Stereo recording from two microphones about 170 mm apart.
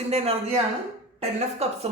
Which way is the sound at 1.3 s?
40° right (ahead or behind).